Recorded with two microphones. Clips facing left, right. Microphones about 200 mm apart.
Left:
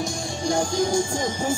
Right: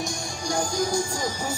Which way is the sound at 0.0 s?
25° left (ahead or behind).